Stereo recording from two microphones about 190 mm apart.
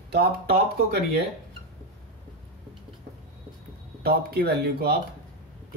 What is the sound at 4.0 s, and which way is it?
Speech, 55° right (ahead or behind).